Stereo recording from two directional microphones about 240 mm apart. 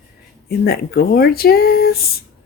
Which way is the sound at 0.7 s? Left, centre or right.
Left.